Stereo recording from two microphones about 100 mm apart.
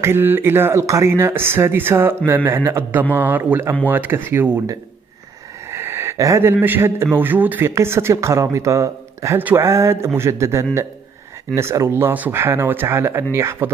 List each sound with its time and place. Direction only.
0.0 s speech: 20° right (ahead or behind)
5.7 s a sound: 25° right (ahead or behind)
6.6 s speech: 25° right (ahead or behind)
9.4 s speech: 20° right (ahead or behind)